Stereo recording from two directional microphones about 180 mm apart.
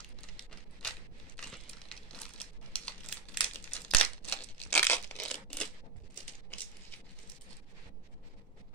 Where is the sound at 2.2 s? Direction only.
5° left (ahead or behind).